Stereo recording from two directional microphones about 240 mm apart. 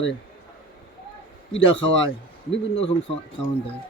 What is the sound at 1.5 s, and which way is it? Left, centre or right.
Speech, left.